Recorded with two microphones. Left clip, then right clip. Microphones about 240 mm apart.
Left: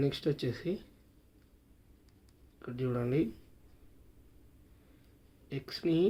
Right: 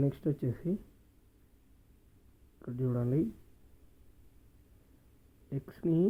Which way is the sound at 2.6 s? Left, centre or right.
Centre.